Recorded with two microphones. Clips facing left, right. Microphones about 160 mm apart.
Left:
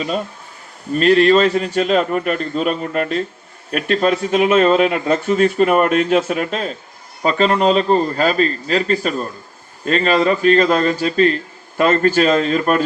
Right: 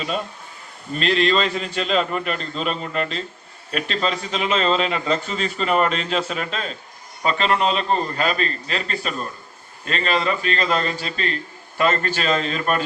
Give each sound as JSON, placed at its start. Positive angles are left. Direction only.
{"t": 0.9, "sound": "a man's voice", "side_deg": 45}